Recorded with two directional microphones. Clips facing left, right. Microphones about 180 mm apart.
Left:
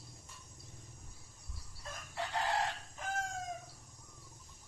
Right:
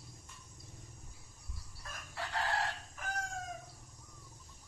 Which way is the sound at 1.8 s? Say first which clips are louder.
Left 3 dB; 20° left (ahead or behind).